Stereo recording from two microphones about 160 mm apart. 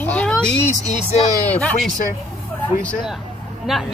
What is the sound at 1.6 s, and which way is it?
Speech, 5° left (ahead or behind).